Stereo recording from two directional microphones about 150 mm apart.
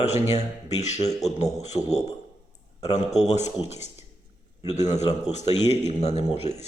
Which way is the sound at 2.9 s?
50° left (ahead or behind).